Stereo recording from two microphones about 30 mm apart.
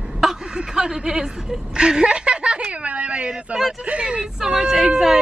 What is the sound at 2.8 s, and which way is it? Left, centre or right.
Speech, right.